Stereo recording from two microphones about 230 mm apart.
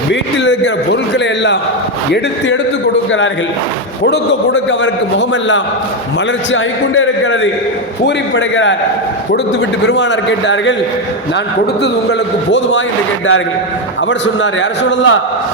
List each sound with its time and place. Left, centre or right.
0.1 s a man's voice: left
4.0 s a man's voice: left
9.8 s a man's voice: left
12.5 s a man's voice: left
14.1 s a man's voice: left